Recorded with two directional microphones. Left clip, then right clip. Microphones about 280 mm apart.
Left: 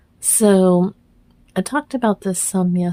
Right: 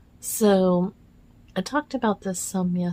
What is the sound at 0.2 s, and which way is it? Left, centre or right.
A woman's voice, left.